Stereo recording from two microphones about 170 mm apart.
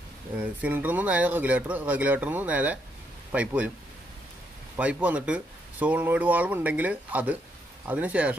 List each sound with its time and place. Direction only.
0.4 s speech: 10° right (ahead or behind)
4.7 s speech: 10° right (ahead or behind)